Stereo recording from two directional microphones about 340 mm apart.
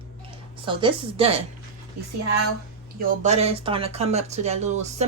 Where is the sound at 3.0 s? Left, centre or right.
Centre.